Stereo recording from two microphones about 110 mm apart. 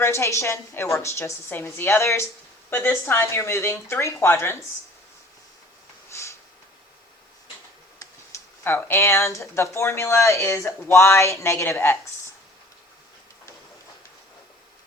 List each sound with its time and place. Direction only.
0.0 s a woman's voice: 25° left (ahead or behind)
6.1 s snort: 25° left (ahead or behind)
7.9 s a woman's voice: 25° left (ahead or behind)